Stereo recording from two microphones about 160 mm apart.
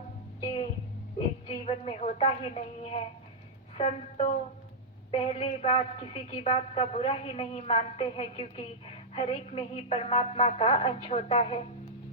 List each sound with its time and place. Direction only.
0.4 s music: 35° left (ahead or behind)
1.5 s a woman's voice: 35° left (ahead or behind)